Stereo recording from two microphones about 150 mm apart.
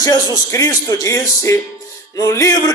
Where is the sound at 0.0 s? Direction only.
25° left (ahead or behind).